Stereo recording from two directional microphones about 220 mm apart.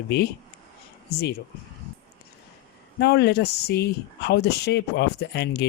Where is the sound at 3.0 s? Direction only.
50° left (ahead or behind).